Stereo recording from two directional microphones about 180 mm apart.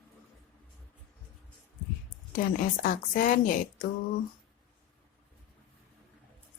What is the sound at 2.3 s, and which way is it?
A woman's voice, 50° left (ahead or behind).